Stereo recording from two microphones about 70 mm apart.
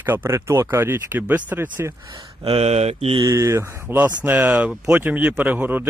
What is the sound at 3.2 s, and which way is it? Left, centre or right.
Speech, right.